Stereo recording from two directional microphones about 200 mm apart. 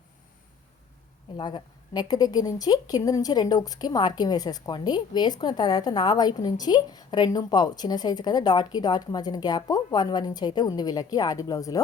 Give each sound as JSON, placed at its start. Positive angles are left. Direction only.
{"t": 1.4, "sound": "a woman's voice", "side_deg": 20}